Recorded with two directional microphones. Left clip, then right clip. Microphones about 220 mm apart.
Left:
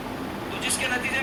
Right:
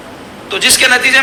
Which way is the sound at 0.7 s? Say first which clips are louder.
Right 18 dB; 45° right (ahead or behind).